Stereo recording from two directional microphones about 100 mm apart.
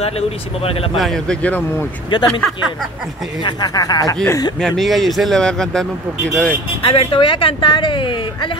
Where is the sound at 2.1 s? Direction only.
50° left (ahead or behind).